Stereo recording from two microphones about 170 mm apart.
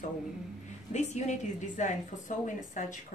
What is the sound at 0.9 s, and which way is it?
A woman's voice, 45° left (ahead or behind).